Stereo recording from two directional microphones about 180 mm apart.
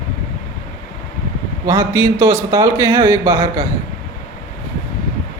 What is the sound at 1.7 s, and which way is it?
A man's voice, 15° right (ahead or behind).